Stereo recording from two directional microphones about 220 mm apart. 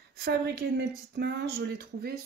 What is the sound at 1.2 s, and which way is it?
Speech, 50° right (ahead or behind).